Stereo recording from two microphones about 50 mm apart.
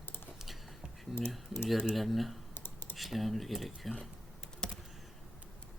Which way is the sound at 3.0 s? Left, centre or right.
Centre.